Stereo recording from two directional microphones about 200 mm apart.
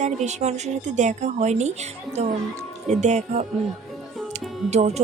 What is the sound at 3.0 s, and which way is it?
Music, 35° right (ahead or behind).